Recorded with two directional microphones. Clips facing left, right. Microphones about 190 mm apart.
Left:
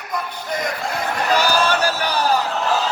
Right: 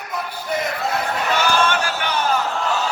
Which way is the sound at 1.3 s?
35° left (ahead or behind).